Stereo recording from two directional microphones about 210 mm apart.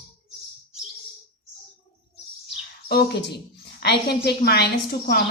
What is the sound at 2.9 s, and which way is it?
A woman's voice, 50° left (ahead or behind).